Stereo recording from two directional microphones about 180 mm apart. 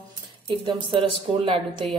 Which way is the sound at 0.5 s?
25° right (ahead or behind).